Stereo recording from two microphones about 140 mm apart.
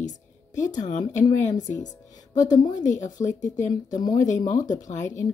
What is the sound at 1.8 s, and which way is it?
A woman's voice, 65° left (ahead or behind).